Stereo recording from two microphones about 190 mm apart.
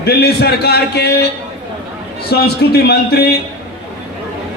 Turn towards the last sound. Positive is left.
turn(degrees=55)  # may be behind; listen again after turning